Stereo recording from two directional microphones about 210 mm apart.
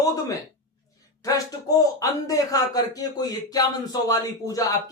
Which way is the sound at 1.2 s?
15° left (ahead or behind).